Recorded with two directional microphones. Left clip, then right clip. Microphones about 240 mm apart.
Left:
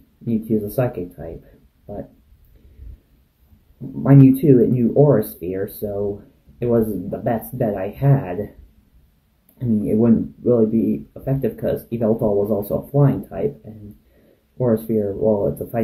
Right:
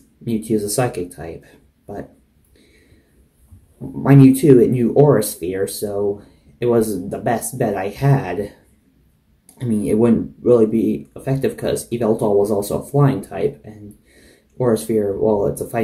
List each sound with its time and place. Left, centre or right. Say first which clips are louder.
0.2 s speech: right 2 dB; centre
4.0 s speech: right 2 dB; centre
9.6 s speech: right 2 dB; centre
14.6 s speech: right 2 dB; centre